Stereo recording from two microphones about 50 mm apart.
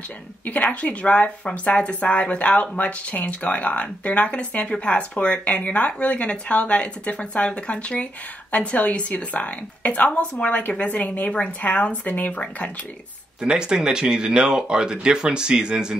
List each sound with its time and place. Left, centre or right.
0.5 s speech: left
13.4 s speech: centre